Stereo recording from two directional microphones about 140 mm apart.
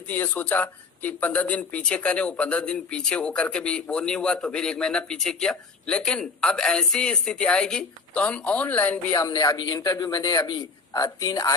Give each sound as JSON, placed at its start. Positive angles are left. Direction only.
{"t": 0.1, "sound": "speech", "side_deg": 15}
{"t": 9.1, "sound": "a man's voice", "side_deg": 25}